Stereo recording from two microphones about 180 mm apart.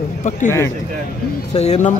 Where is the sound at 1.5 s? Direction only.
40° left (ahead or behind).